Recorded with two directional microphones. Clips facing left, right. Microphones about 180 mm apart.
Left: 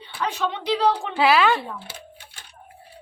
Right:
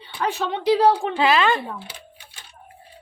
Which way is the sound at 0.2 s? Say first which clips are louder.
Right 2 dB; 50° right (ahead or behind).